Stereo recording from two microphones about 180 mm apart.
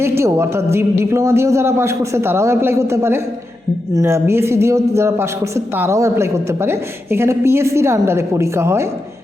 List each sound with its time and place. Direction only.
0.2 s a man's voice: 15° right (ahead or behind)